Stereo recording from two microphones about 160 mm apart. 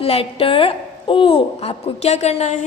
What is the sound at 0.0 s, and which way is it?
A woman's voice, 35° left (ahead or behind).